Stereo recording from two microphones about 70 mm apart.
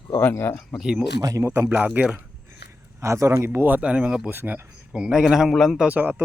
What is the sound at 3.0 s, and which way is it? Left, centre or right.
Speech, right.